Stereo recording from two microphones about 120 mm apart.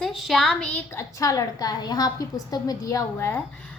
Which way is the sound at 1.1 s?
30° left (ahead or behind).